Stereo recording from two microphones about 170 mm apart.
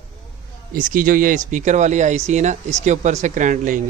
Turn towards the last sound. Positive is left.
turn(degrees=-50)  # may be behind; listen again after turning